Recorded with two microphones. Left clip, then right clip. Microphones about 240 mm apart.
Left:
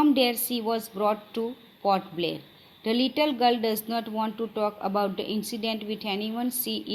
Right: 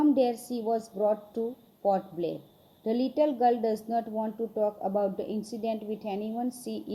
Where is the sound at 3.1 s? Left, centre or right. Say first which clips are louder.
Even; left.